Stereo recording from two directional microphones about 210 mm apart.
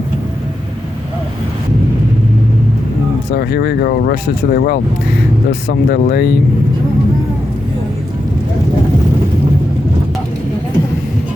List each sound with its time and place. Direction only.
3.2 s speech: 50° left (ahead or behind)